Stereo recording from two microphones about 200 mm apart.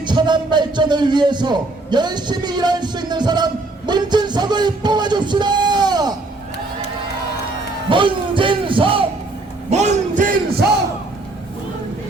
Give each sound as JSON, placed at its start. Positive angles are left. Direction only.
{"t": 0.0, "sound": "a man's voice", "side_deg": -20}
{"t": 7.9, "sound": "a man's voice", "side_deg": -25}
{"t": 9.6, "sound": "a sound", "side_deg": -35}